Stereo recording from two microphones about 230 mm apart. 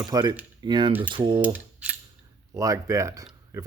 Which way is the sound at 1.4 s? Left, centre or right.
Centre.